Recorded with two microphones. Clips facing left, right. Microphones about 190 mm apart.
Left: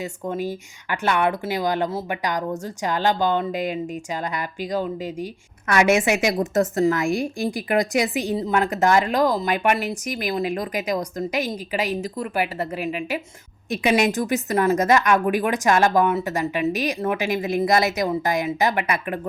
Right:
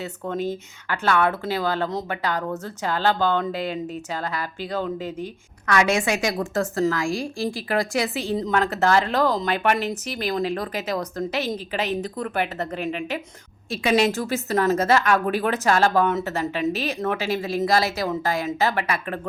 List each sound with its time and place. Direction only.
0.0 s a woman's voice: 10° left (ahead or behind)